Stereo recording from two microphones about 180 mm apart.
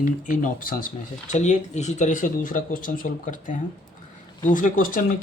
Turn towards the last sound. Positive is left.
turn(degrees=50)  # may be behind; listen again after turning